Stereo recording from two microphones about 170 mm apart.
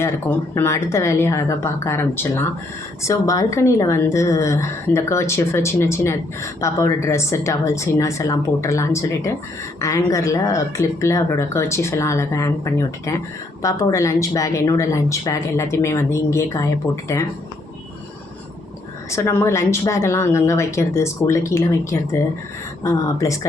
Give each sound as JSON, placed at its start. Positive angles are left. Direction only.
{"t": 0.0, "sound": "a woman's voice", "side_deg": 15}
{"t": 19.1, "sound": "a woman's voice", "side_deg": 15}